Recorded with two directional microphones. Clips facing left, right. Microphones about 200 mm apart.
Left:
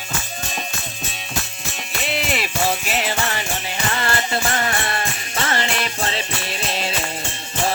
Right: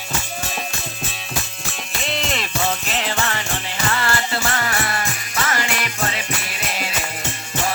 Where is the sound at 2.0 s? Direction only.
5° left (ahead or behind).